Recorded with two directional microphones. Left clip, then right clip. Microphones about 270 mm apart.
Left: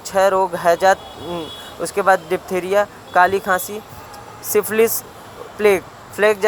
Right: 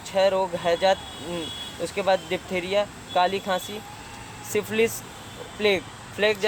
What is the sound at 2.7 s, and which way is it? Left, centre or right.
Speech, centre.